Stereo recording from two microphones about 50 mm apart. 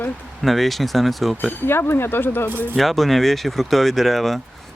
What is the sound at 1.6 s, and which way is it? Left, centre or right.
Speech, left.